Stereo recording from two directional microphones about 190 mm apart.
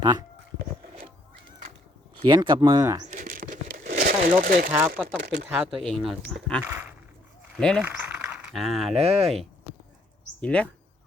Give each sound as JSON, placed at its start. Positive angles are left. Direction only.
{"t": 0.0, "sound": "speech", "side_deg": -20}
{"t": 2.1, "sound": "speech", "side_deg": -25}
{"t": 3.1, "sound": "crumpling", "side_deg": -50}
{"t": 4.7, "sound": "speech", "side_deg": -10}
{"t": 5.0, "sound": "speech", "side_deg": -55}
{"t": 5.6, "sound": "speech", "side_deg": 0}
{"t": 6.6, "sound": "speech", "side_deg": -10}
{"t": 7.5, "sound": "speech", "side_deg": 0}
{"t": 7.9, "sound": "a sound", "side_deg": -10}
{"t": 9.0, "sound": "speech", "side_deg": -30}
{"t": 10.4, "sound": "speech", "side_deg": 5}